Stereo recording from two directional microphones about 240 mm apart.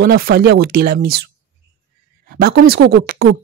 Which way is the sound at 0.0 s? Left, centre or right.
Right.